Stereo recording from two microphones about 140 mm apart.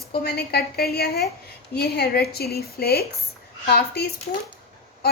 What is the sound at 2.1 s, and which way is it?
Speech, 90° left.